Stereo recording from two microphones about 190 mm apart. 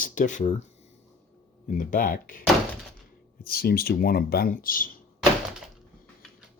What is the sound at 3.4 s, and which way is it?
Speech, 50° left (ahead or behind).